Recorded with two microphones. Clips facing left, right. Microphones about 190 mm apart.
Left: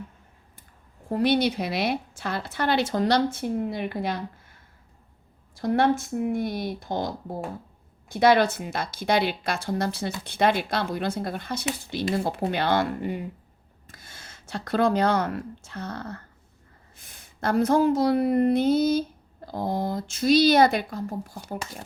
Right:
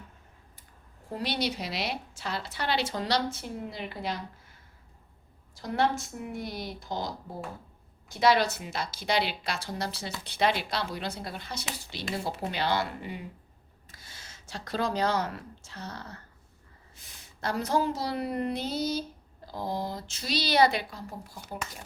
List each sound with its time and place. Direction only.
1.1 s a woman's voice: 55° left (ahead or behind)
5.5 s a woman's voice: 55° left (ahead or behind)
8.1 s a woman's voice: 55° left (ahead or behind)